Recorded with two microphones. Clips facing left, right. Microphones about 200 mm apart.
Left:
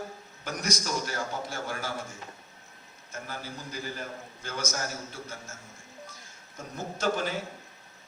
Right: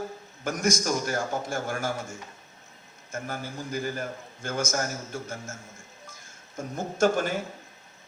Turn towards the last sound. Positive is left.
turn(degrees=-50)  # may be behind; listen again after turning